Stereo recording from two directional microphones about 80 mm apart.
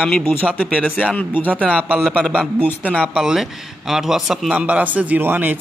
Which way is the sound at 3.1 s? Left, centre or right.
Centre.